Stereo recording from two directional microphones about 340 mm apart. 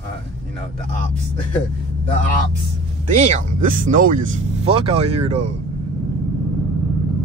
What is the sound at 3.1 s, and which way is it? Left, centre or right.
Speech, right.